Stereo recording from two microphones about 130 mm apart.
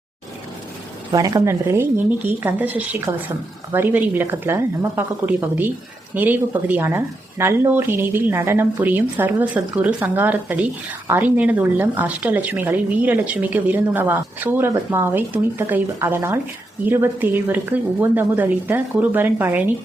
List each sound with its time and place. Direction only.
1.1 s a woman's voice: 30° right (ahead or behind)